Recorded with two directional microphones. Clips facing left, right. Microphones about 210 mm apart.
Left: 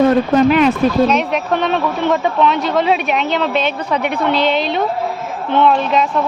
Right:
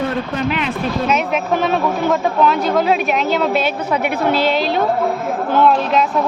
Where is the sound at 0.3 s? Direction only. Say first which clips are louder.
Left 11 dB; 40° left (ahead or behind).